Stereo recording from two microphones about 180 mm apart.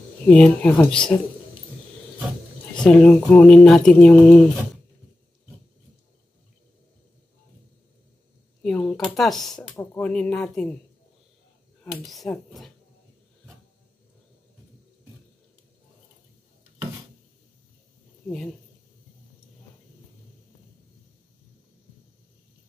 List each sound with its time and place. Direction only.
0.3 s speech: 5° left (ahead or behind)
2.8 s speech: 5° left (ahead or behind)
8.6 s speech: centre (ahead or behind)
11.9 s speech: centre (ahead or behind)